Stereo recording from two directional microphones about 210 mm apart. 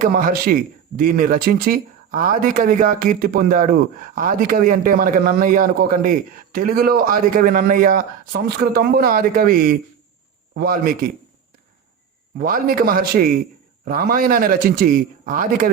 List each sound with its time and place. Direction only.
0.0 s a man's voice: 45° right (ahead or behind)
12.4 s a man's voice: 40° right (ahead or behind)